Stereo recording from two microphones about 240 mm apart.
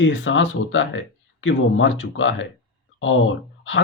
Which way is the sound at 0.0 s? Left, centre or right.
Left.